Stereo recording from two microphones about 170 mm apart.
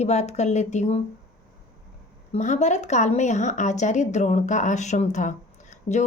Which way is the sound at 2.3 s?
45° left (ahead or behind).